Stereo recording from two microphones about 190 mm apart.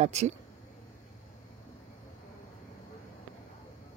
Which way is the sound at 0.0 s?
35° right (ahead or behind).